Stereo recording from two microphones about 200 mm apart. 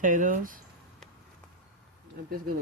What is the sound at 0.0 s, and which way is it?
Speech, 40° right (ahead or behind).